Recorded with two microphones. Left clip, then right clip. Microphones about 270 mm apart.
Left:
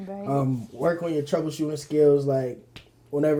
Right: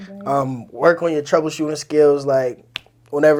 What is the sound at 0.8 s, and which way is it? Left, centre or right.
Speech, centre.